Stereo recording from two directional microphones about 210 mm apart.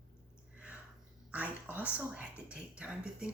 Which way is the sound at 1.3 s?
5° right (ahead or behind).